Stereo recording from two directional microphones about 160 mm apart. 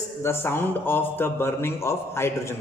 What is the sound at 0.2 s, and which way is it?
A man's voice, 15° left (ahead or behind).